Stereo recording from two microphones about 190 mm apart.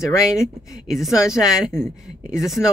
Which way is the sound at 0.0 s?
15° left (ahead or behind).